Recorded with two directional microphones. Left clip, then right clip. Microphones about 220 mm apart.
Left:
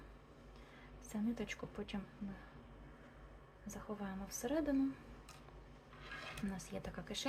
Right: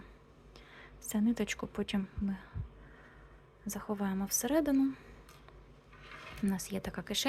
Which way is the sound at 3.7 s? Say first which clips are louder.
Right 9 dB; 45° right (ahead or behind).